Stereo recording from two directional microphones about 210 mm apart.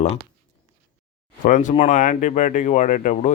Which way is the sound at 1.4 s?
35° left (ahead or behind).